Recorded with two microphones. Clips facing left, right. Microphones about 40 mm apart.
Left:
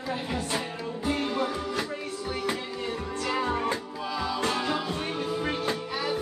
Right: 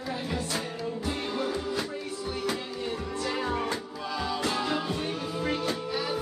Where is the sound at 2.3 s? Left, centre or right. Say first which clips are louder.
Left 1 dB; centre.